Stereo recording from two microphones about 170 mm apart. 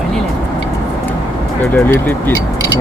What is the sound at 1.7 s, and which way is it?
Speech, 10° left (ahead or behind).